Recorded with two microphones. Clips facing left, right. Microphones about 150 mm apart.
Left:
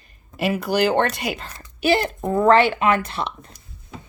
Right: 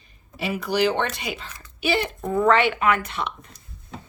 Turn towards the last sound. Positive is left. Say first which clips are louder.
# left 2 dB
turn(degrees=35)  # may be behind; listen again after turning